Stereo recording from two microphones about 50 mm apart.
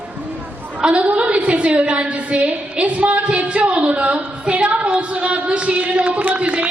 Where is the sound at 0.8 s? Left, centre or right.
Right.